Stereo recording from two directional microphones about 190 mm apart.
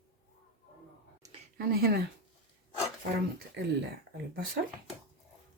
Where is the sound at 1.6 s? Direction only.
55° right (ahead or behind).